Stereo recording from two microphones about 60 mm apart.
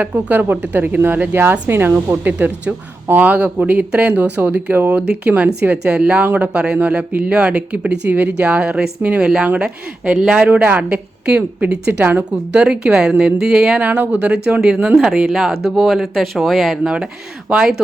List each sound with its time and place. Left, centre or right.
0.0 s speech: right
2.2 s speech: right
12.6 s speech: centre
13.7 s speech: right
15.0 s speech: centre
16.8 s speech: centre